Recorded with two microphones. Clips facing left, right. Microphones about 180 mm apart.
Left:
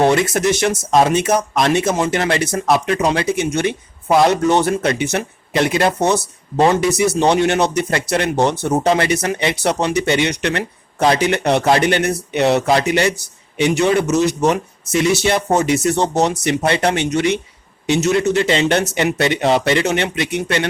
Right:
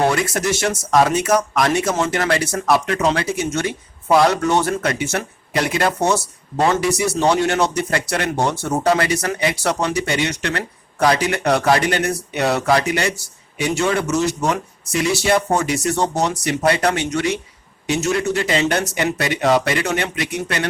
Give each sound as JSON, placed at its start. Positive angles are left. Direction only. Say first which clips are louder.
{"t": 0.1, "sound": "speech", "louder": "left 4 dB", "side_deg": 20}